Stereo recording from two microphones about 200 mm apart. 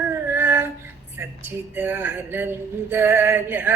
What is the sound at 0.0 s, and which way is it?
Female singing, 10° right (ahead or behind).